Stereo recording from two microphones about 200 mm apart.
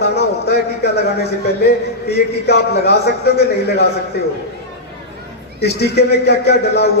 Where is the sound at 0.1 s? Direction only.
55° left (ahead or behind).